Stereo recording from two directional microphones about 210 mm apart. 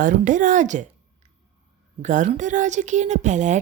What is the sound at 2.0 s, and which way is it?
Speech, 35° right (ahead or behind).